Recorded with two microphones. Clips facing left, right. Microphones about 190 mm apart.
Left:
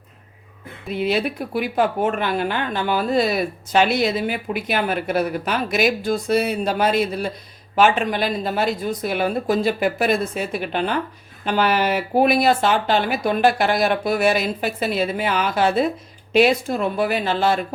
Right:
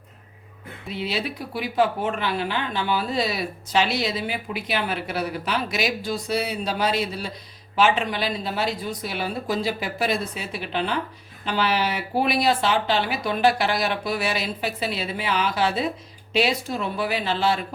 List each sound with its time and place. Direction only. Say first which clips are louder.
0.9 s speech: left 7 dB; 50° left (ahead or behind)